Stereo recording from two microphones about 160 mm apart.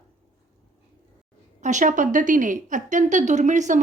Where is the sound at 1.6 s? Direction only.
50° right (ahead or behind).